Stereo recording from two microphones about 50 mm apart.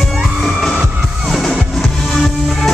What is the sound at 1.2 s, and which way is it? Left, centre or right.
Music, centre.